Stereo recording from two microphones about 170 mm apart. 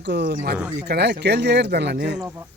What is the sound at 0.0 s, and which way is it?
Speech, 80° right.